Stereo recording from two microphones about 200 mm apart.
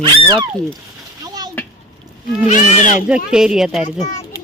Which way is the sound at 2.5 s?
40° left (ahead or behind).